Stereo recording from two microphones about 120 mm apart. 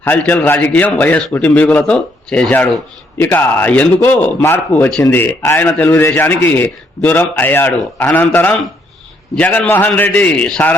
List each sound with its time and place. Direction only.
0.0 s a man's voice: 15° left (ahead or behind)
5.9 s a man's voice: 20° left (ahead or behind)